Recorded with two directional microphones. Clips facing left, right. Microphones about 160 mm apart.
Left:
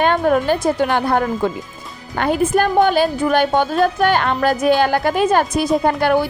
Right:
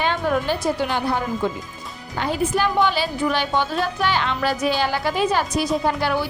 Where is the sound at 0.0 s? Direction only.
50° left (ahead or behind).